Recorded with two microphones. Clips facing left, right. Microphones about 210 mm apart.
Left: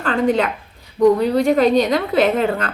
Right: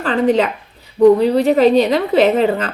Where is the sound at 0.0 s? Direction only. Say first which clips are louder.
Right 2 dB; centre (ahead or behind).